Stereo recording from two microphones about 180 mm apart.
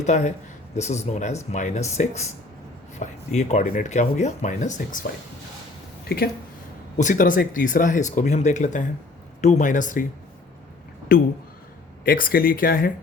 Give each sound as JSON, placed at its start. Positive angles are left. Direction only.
{"t": 0.0, "sound": "speech", "side_deg": 40}
{"t": 6.1, "sound": "speech", "side_deg": 55}
{"t": 6.9, "sound": "speech", "side_deg": 45}
{"t": 11.1, "sound": "speech", "side_deg": 55}